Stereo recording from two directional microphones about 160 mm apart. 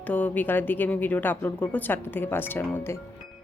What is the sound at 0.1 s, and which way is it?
A woman's voice, 10° left (ahead or behind).